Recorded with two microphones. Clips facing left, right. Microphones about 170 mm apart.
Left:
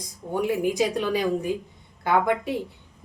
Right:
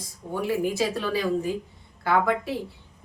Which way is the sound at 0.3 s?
15° left (ahead or behind).